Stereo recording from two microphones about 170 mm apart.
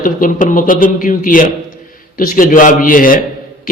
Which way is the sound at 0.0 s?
50° left (ahead or behind).